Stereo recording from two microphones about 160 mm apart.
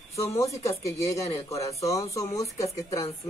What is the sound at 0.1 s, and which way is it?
A man's voice, 20° left (ahead or behind).